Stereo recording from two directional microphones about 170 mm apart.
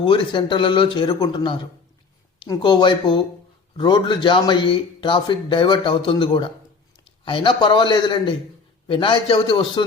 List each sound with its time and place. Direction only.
0.0 s a man's voice: 30° left (ahead or behind)